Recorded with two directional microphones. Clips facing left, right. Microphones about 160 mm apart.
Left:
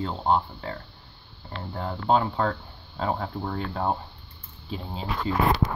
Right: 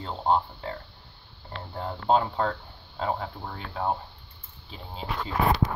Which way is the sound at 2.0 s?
30° right (ahead or behind).